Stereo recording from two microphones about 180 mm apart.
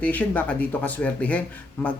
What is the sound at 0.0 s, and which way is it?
Speech, 10° left (ahead or behind).